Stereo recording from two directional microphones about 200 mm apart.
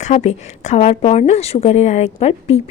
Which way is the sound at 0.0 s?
35° left (ahead or behind).